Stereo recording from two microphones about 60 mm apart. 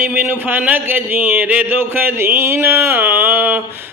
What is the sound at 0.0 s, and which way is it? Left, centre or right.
Speech, right.